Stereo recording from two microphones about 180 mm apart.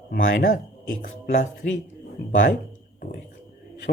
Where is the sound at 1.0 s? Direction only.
50° left (ahead or behind).